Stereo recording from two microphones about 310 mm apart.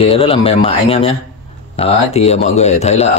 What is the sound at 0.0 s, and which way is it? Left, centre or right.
Speech, centre.